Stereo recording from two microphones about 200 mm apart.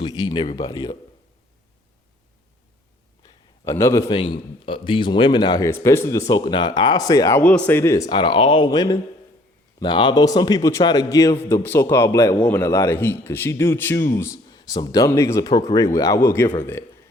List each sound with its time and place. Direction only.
0.0 s a man's voice: 20° left (ahead or behind)
3.6 s a man's voice: 15° left (ahead or behind)
4.1 s a man's voice: 25° left (ahead or behind)